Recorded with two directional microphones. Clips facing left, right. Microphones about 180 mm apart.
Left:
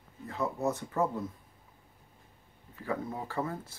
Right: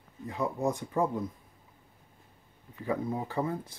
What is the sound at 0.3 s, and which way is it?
Speech, 15° right (ahead or behind).